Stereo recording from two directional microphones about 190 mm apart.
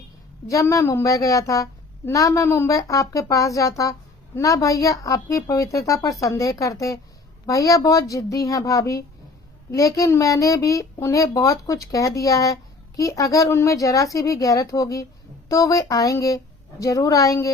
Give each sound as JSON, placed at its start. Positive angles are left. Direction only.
{"t": 0.4, "sound": "a woman's voice", "side_deg": 15}